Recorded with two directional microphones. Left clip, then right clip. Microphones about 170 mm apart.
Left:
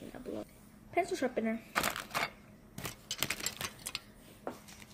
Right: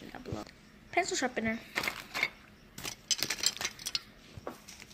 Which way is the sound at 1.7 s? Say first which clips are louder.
Left 1 dB; 45° left (ahead or behind).